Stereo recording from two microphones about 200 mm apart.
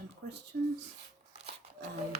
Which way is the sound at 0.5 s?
45° right (ahead or behind).